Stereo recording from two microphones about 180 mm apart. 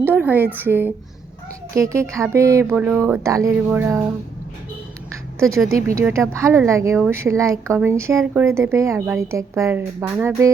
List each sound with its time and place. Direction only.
0.0 s a sound: 10° right (ahead or behind)
0.6 s speech: 10° right (ahead or behind)
5.9 s speech: 15° right (ahead or behind)